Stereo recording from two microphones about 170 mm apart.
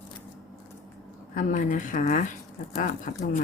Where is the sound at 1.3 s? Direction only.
50° left (ahead or behind).